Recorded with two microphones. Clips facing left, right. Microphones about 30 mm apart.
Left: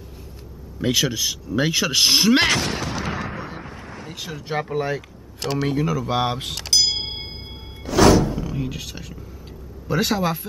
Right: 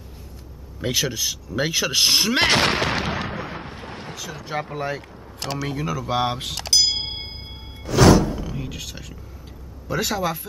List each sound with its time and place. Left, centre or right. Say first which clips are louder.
0.7 s speech: left 3 dB; centre
2.4 s artillery fire: right 3 dB; right
4.6 s speech: left 3 dB; centre
7.8 s music: even; centre
9.8 s speech: left 2 dB; centre